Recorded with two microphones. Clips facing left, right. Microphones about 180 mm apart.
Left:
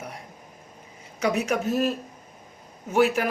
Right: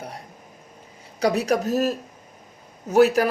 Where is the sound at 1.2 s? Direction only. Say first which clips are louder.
Right 3 dB; 35° right (ahead or behind).